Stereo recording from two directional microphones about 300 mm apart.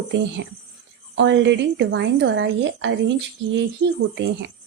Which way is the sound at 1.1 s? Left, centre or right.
Right.